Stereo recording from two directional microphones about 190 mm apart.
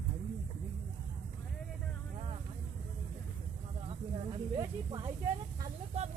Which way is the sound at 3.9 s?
25° right (ahead or behind).